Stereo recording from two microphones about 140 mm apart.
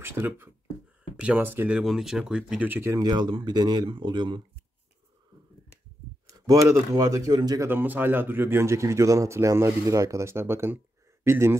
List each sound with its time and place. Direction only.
0.0 s speech: 15° right (ahead or behind)
3.1 s speech: 35° right (ahead or behind)
6.4 s a man's voice: 25° right (ahead or behind)
7.7 s a man's voice: 15° right (ahead or behind)